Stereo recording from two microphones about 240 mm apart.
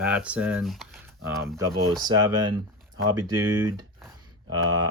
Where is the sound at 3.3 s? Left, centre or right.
Centre.